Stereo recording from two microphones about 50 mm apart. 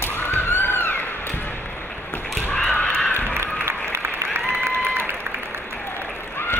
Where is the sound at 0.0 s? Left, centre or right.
Left.